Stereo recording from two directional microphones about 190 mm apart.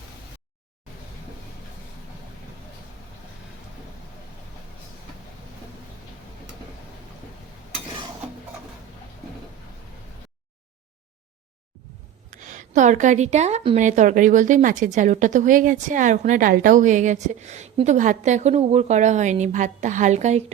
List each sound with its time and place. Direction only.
12.3 s a woman's voice: 40° right (ahead or behind)